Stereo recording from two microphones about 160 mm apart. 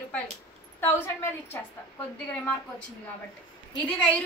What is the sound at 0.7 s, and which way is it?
Speech, 15° left (ahead or behind).